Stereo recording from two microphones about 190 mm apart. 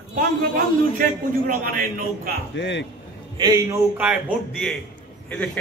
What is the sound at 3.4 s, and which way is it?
Speech, 15° right (ahead or behind).